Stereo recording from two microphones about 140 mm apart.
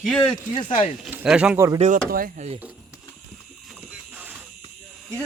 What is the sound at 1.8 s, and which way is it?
Speech, 80° right.